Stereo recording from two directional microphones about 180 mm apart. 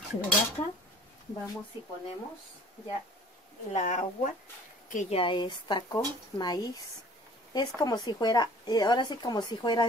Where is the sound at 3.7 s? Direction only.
45° left (ahead or behind).